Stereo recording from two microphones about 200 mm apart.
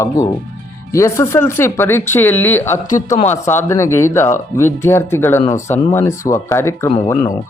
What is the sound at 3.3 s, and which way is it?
Speech, 10° left (ahead or behind).